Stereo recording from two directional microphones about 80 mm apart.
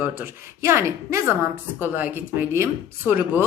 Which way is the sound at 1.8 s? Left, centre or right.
Right.